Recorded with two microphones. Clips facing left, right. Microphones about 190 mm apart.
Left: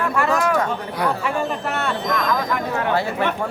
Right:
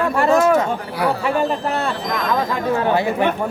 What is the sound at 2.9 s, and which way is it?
Speech, 15° right (ahead or behind).